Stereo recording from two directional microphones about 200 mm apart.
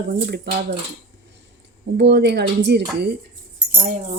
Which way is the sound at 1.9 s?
60° right (ahead or behind).